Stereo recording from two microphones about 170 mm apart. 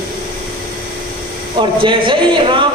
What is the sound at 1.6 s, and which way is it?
A man's voice, 30° right (ahead or behind).